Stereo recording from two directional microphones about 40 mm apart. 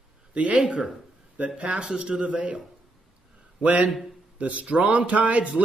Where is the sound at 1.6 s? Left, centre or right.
Right.